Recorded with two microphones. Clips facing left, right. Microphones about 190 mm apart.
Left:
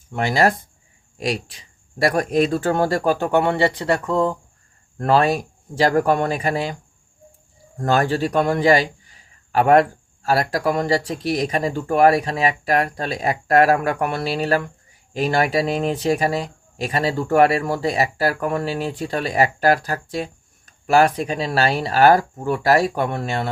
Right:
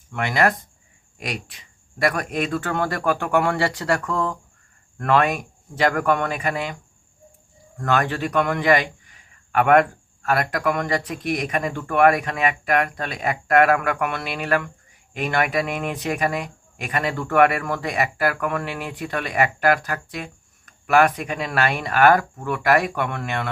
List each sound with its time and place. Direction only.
0.1 s speech: 30° left (ahead or behind)
7.8 s a man's voice: 30° left (ahead or behind)